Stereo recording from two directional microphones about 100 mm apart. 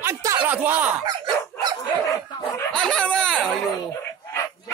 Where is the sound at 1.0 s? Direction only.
45° right (ahead or behind).